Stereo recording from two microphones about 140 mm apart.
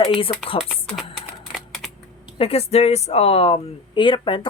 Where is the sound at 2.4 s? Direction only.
45° left (ahead or behind).